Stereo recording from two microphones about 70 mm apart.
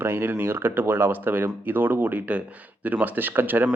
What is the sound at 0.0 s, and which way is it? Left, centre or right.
Speech, right.